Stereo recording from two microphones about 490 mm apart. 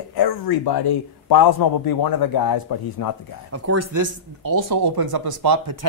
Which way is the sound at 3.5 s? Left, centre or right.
Right.